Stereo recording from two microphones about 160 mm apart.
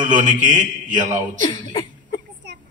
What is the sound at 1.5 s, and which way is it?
Chuckle, 30° left (ahead or behind).